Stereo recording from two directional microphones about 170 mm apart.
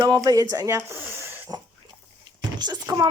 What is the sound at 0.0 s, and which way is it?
Speech, 25° right (ahead or behind).